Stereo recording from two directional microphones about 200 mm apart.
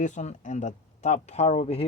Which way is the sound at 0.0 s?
35° left (ahead or behind).